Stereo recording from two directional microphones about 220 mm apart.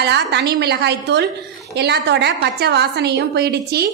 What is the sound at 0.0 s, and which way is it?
A woman's voice, 50° right (ahead or behind).